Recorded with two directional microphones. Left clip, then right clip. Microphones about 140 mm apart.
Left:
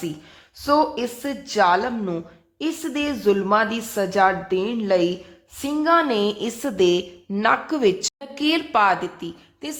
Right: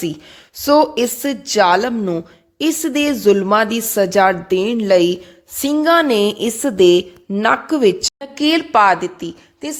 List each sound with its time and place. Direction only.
0.0 s a woman's voice: 50° right (ahead or behind); by 9.7 s 25° right (ahead or behind)